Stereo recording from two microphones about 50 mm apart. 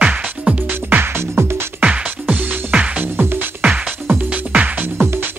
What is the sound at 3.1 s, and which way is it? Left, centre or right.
Music, right.